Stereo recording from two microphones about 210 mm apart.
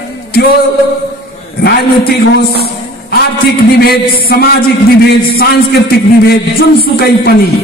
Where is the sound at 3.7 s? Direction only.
50° left (ahead or behind).